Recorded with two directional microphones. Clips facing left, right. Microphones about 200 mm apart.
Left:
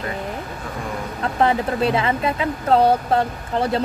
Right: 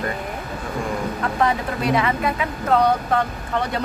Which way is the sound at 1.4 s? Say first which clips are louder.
Left 4 dB; 30° left (ahead or behind).